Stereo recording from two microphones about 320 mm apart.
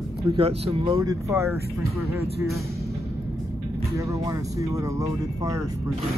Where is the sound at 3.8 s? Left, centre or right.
Centre.